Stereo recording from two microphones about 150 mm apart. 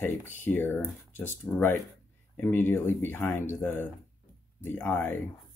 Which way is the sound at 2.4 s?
15° left (ahead or behind).